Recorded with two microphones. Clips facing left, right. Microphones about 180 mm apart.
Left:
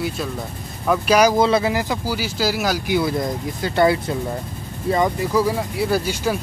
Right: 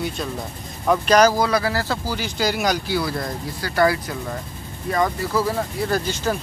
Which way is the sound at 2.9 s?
20° left (ahead or behind).